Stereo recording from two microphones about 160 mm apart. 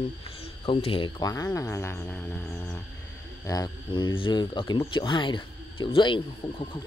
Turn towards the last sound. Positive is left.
turn(degrees=30)  # may be behind; listen again after turning